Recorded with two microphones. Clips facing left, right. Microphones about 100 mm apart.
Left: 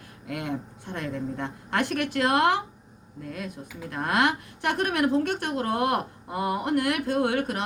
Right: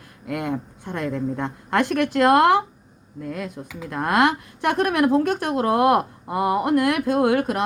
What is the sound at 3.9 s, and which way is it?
Speech, 50° right (ahead or behind).